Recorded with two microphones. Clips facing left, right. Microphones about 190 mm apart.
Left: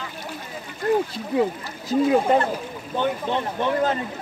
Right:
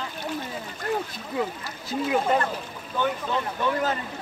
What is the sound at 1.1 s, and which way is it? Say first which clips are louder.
Speech: left 7 dB; 25° left (ahead or behind).